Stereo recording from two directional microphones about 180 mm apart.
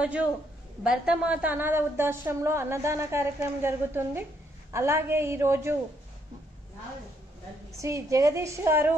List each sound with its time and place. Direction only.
0.0 s a woman's voice: 10° right (ahead or behind)
7.7 s a woman's voice: 15° right (ahead or behind)